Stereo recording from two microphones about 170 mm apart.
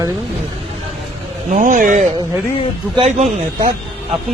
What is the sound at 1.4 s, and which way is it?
Speech, 50° right (ahead or behind).